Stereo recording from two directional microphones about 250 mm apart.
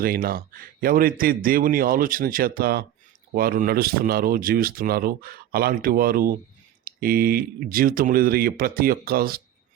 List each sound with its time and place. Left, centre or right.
0.0 s speech: right